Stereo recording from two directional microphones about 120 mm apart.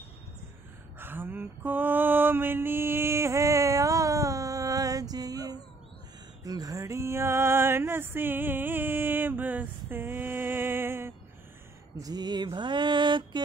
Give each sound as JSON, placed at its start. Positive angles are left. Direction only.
{"t": 0.9, "sound": "mantra", "side_deg": -15}
{"t": 6.4, "sound": "a sound", "side_deg": -30}
{"t": 12.0, "sound": "mantra", "side_deg": -35}